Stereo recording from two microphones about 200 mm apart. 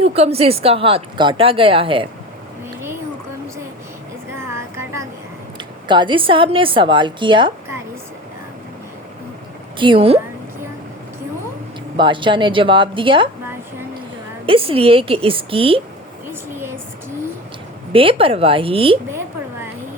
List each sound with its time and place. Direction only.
0.0 s a woman's voice: 30° right (ahead or behind)
4.4 s a sound: 15° right (ahead or behind)
5.5 s a woman's voice: 25° right (ahead or behind)
9.7 s a woman's voice: 25° right (ahead or behind)
11.9 s a woman's voice: 25° right (ahead or behind)
14.4 s a woman's voice: 30° right (ahead or behind)
16.3 s a sound: 10° right (ahead or behind)
17.9 s a woman's voice: 30° right (ahead or behind)